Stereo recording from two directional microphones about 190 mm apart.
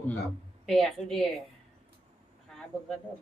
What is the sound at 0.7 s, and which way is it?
Speech, centre (ahead or behind).